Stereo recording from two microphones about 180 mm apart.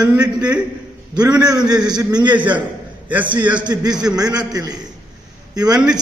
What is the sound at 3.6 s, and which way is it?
A man's voice, 20° right (ahead or behind).